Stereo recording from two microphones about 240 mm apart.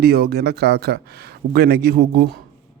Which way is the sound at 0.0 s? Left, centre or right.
Right.